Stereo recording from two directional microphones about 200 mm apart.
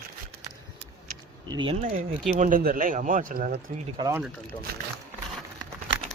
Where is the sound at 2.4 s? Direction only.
45° right (ahead or behind).